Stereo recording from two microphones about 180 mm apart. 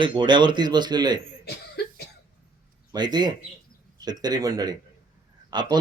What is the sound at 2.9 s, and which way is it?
Speech, 25° right (ahead or behind).